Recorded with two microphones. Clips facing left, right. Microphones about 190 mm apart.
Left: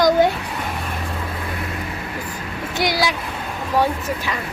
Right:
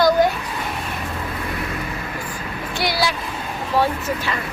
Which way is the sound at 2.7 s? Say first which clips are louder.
Left 2 dB; 15° left (ahead or behind).